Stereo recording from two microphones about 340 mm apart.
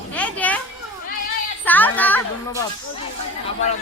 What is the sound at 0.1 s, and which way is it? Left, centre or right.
Children playing, centre.